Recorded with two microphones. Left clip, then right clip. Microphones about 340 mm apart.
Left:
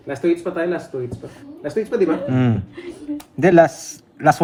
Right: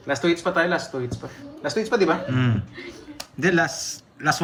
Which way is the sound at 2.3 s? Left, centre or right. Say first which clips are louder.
Left 5 dB; centre.